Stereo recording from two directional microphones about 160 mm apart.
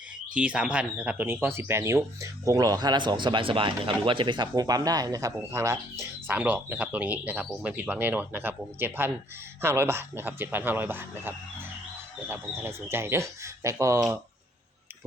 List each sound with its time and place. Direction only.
0.3 s speech: 5° right (ahead or behind)